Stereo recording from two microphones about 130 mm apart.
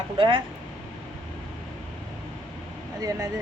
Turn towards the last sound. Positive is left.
turn(degrees=-25)  # may be behind; listen again after turning